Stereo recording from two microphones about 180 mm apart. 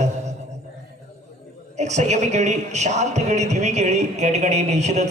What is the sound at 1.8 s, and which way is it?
A man's voice, 40° right (ahead or behind).